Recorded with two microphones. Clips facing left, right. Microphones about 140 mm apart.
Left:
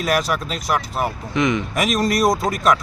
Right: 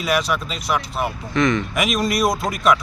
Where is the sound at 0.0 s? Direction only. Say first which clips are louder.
Left 1 dB; 45° left (ahead or behind).